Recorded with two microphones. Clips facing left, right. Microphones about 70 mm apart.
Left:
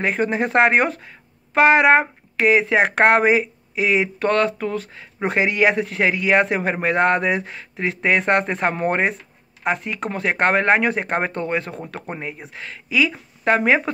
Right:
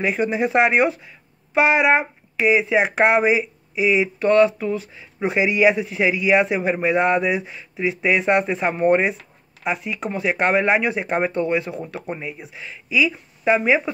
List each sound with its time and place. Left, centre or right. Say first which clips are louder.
0.0 s speech: even; left